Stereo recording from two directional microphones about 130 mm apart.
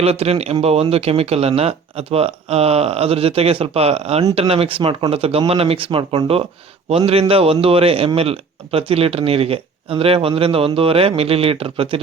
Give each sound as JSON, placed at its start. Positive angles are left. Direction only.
{"t": 0.0, "sound": "a man's voice", "side_deg": -50}